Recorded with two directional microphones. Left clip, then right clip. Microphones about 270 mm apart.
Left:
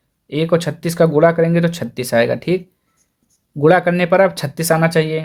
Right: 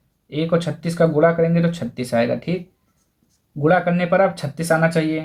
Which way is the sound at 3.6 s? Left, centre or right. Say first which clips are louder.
Left 5 dB; left.